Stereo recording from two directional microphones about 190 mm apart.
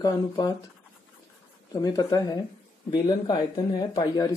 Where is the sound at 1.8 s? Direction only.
20° left (ahead or behind).